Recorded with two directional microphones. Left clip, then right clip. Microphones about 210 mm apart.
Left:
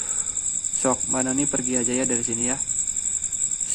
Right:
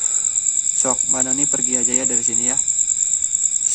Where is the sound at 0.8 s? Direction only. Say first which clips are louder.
Left 1 dB; 10° right (ahead or behind).